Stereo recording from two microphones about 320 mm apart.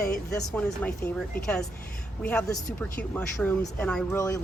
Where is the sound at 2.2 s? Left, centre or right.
Centre.